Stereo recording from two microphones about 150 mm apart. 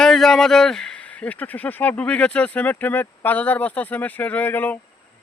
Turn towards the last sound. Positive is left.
turn(degrees=10)  # may be behind; listen again after turning